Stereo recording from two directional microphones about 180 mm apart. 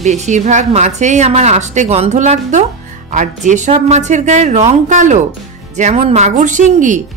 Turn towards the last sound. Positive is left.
turn(degrees=-45)  # may be behind; listen again after turning